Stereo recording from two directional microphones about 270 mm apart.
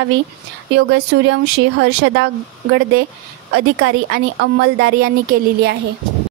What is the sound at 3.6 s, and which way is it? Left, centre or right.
A woman's voice, right.